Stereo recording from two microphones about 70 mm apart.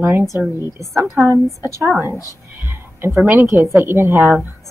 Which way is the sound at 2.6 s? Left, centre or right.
Right.